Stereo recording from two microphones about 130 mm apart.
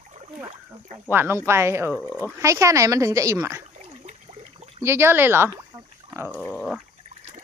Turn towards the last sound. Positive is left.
turn(degrees=5)  # may be behind; listen again after turning